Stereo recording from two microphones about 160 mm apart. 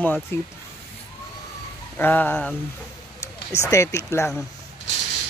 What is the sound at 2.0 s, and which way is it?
Speech, 10° left (ahead or behind).